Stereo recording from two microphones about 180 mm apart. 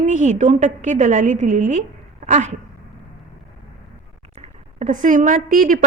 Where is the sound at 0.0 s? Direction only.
45° right (ahead or behind).